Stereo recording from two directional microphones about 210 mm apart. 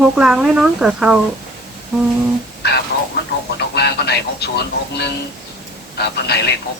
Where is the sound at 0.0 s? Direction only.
5° right (ahead or behind).